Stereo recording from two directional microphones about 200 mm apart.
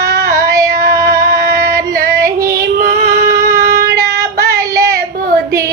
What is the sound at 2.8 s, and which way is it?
Female singing, 45° right (ahead or behind).